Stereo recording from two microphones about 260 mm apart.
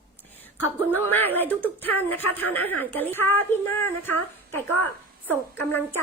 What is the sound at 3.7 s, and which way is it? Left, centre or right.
Speech, left.